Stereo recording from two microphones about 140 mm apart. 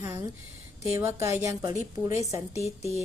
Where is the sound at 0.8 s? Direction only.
20° right (ahead or behind).